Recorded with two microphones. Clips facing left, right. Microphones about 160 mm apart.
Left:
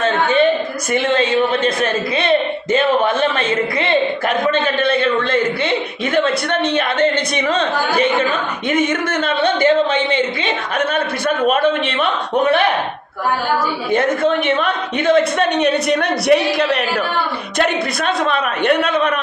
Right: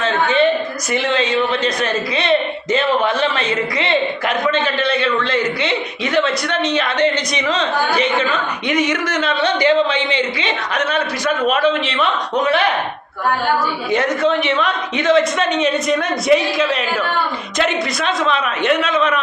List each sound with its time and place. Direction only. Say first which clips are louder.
0.0 s a sound: left 1 dB; 50° left (ahead or behind)
0.9 s speech: left 2 dB; 50° left (ahead or behind)
4.5 s speech: left 2 dB; 55° left (ahead or behind)
13.9 s a man's voice: left 1 dB; 50° left (ahead or behind)
17.6 s a man's voice: left 1 dB; 50° left (ahead or behind)